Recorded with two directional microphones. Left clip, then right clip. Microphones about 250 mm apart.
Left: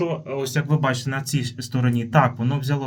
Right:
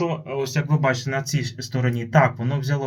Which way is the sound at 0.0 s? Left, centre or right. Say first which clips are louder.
Even; left.